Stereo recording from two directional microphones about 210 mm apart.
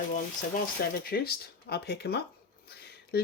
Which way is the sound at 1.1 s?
45° left (ahead or behind).